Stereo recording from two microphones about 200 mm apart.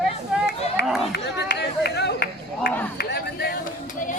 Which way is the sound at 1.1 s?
55° left (ahead or behind).